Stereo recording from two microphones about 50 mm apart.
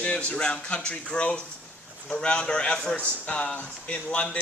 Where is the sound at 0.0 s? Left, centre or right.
Left.